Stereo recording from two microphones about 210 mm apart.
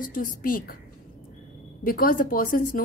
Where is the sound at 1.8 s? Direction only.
45° left (ahead or behind).